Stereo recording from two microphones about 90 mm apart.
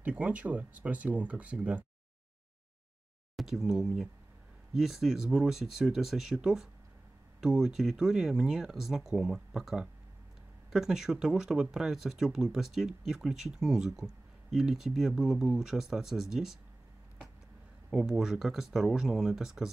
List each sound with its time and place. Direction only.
0.0 s speech: 15° right (ahead or behind)
3.3 s speech: 5° right (ahead or behind)
17.8 s speech: 5° right (ahead or behind)